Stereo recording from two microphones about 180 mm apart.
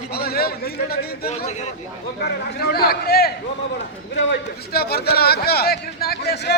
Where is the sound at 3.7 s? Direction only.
80° left.